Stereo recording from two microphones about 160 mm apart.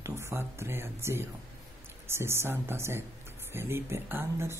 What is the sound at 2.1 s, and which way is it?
Speech, 15° right (ahead or behind).